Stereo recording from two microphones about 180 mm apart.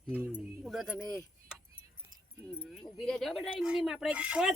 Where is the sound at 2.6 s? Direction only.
Centre (ahead or behind).